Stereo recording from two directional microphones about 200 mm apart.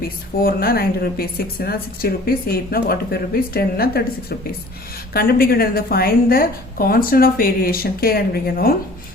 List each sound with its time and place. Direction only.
0.3 s a woman's voice: 50° left (ahead or behind)